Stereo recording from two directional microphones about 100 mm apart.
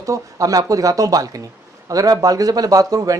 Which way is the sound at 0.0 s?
35° right (ahead or behind).